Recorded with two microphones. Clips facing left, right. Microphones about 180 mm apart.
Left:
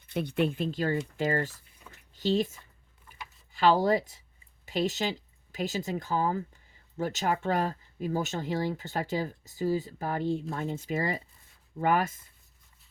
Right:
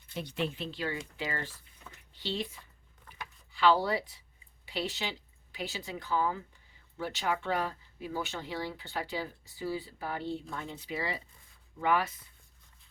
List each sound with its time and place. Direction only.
0.1 s speech: 55° left (ahead or behind)